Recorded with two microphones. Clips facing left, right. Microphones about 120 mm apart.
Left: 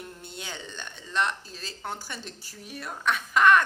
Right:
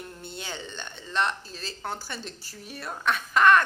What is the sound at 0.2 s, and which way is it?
Speech, centre (ahead or behind).